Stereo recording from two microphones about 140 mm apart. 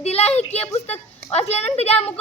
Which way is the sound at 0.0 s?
50° left (ahead or behind).